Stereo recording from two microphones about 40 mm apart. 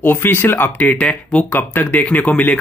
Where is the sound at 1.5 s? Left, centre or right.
Left.